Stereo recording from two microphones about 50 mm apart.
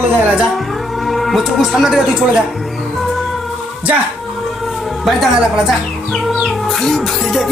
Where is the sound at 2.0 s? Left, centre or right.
Centre.